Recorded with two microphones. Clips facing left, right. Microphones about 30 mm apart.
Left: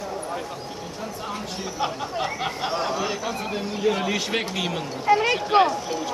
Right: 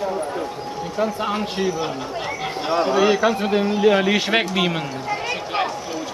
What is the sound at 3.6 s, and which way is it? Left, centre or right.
A man's voice, right.